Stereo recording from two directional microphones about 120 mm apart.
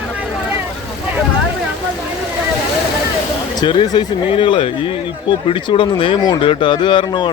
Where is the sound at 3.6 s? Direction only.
40° left (ahead or behind).